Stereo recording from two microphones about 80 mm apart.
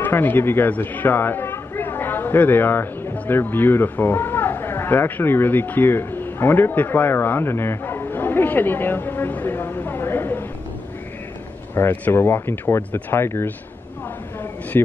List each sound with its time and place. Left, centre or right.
0.0 s a man's voice: left
11.7 s speech: left